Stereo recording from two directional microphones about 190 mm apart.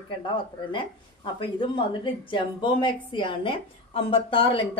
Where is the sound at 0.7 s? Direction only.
25° left (ahead or behind).